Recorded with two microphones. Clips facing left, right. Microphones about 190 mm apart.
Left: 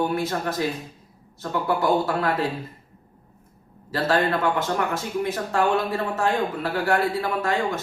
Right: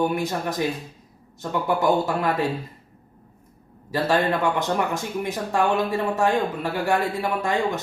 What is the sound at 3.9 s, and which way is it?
Speech, 15° right (ahead or behind).